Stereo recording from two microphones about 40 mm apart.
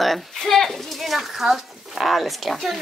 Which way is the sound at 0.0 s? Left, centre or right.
Centre.